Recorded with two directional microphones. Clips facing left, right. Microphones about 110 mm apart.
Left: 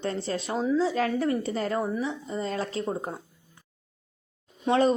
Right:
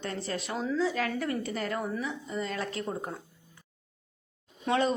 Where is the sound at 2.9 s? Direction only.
25° left (ahead or behind).